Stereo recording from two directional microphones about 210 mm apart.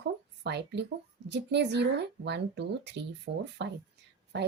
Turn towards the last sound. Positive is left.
turn(degrees=-55)  # may be behind; listen again after turning